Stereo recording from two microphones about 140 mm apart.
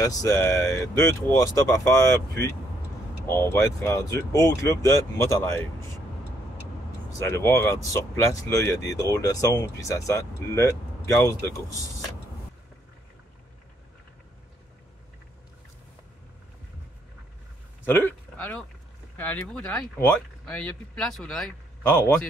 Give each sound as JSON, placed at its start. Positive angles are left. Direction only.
{"t": 0.0, "sound": "speech", "side_deg": 25}
{"t": 7.1, "sound": "speech", "side_deg": 20}
{"t": 17.8, "sound": "speech", "side_deg": 15}
{"t": 21.8, "sound": "speech", "side_deg": 15}